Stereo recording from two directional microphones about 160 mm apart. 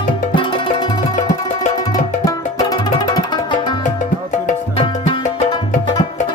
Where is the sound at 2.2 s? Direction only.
25° left (ahead or behind).